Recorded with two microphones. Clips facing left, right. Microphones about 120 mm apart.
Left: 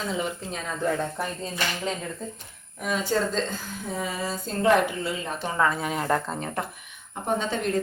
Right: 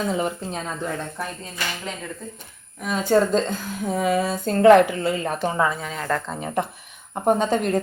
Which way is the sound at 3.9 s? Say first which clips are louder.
Right 9 dB; 65° right (ahead or behind).